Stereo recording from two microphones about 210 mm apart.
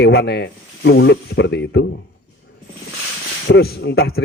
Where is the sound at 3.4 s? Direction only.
50° left (ahead or behind).